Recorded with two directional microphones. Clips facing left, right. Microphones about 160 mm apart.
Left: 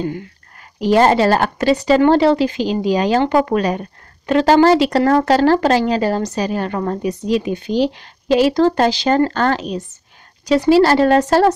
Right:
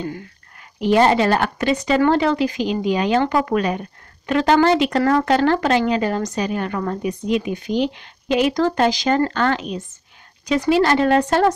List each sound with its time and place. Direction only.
0.6 s speech: 40° left (ahead or behind)